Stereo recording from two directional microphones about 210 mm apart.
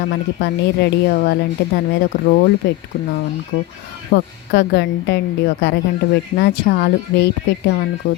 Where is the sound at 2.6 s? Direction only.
55° left (ahead or behind).